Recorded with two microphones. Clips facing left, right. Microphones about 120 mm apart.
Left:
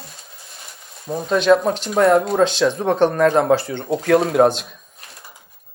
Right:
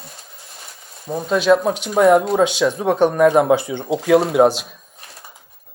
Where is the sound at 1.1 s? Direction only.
5° right (ahead or behind).